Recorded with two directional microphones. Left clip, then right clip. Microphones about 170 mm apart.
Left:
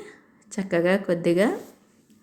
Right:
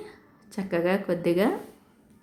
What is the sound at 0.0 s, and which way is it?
A woman's voice, 15° left (ahead or behind).